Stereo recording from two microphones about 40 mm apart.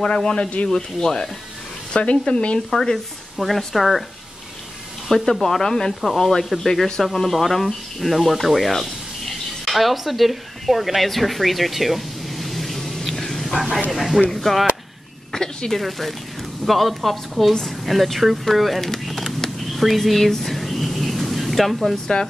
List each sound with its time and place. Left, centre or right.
0.1 s speech: centre
2.0 s speech: left
2.7 s speech: centre
3.3 s speech: centre
5.0 s speech: centre
13.1 s a sound: centre
13.8 s speech: centre
15.3 s a sound: centre
15.8 s speech: centre
18.8 s a sound: centre
22.1 s speech: left